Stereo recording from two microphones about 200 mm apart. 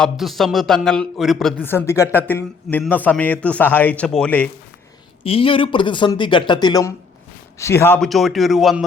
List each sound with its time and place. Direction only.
0.0 s a man's voice: centre (ahead or behind)
5.2 s a man's voice: 25° left (ahead or behind); by 8.8 s centre (ahead or behind)